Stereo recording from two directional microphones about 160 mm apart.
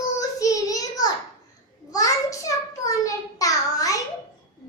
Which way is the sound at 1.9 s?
20° left (ahead or behind).